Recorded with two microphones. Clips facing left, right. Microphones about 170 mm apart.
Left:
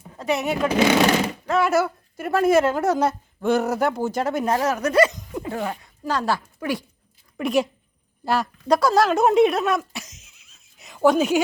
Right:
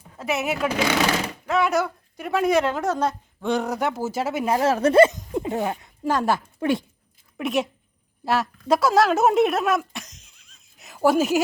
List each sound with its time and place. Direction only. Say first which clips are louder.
0.2 s speech: left 2 dB; 5° right (ahead or behind)
4.6 s speech: right 5 dB; 30° right (ahead or behind)
7.3 s speech: left 3 dB; centre (ahead or behind)